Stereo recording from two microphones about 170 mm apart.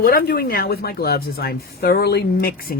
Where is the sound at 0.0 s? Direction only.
60° left (ahead or behind).